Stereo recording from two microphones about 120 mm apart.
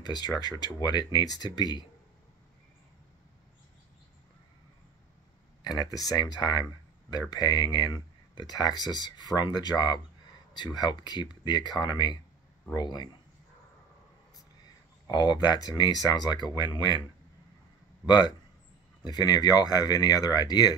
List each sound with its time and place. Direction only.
0.0 s speech: 35° left (ahead or behind)
5.6 s speech: 35° left (ahead or behind)
15.0 s speech: 35° left (ahead or behind)
18.0 s speech: 35° left (ahead or behind)